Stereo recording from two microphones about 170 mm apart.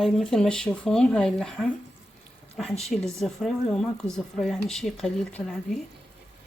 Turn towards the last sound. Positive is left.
turn(degrees=0)  # may be behind; listen again after turning